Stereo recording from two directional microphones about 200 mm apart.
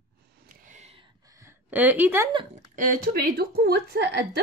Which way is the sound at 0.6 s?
35° right (ahead or behind).